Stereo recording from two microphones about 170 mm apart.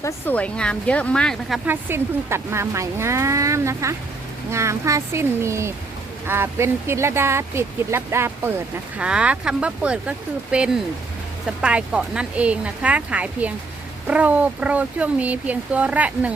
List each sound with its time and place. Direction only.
0.0 s speech: 10° left (ahead or behind)
1.6 s speech: 15° right (ahead or behind)